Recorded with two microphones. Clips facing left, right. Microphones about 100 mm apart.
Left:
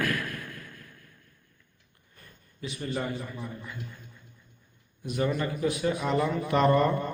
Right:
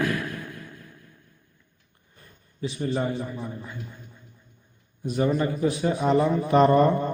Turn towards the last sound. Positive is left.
turn(degrees=-25)  # may be behind; listen again after turning